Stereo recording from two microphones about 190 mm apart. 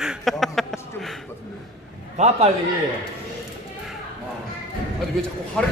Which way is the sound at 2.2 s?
35° right (ahead or behind).